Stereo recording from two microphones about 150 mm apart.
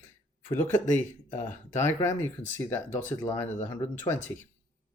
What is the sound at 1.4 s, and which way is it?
Speech, 15° left (ahead or behind).